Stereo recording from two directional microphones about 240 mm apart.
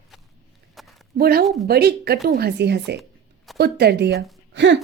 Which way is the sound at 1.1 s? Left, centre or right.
Right.